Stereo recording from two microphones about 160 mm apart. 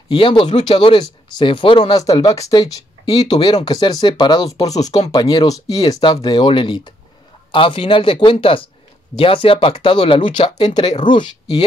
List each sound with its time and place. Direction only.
0.1 s speech: 30° left (ahead or behind)